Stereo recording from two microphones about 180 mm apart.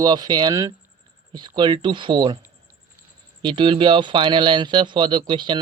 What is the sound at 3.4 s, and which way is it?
Speech, 25° right (ahead or behind).